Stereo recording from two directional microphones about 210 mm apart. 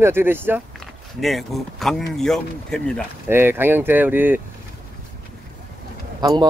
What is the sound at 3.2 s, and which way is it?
Speech, 10° right (ahead or behind).